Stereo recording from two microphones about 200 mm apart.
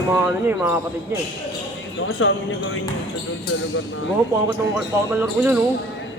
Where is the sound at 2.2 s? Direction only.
75° left (ahead or behind).